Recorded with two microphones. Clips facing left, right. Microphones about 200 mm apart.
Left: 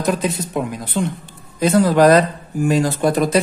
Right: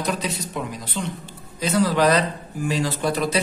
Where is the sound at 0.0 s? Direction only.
50° left (ahead or behind).